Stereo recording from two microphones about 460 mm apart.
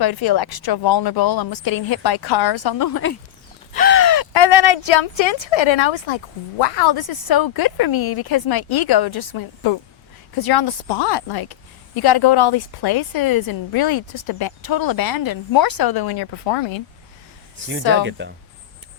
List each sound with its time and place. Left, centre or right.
0.0 s a woman's voice: left
3.7 s crow: centre
4.0 s crow: left
4.3 s a woman's voice: left
18.0 s speech: right